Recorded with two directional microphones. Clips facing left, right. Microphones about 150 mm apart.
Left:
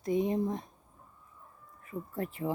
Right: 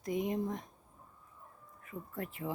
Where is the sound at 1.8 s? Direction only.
35° left (ahead or behind).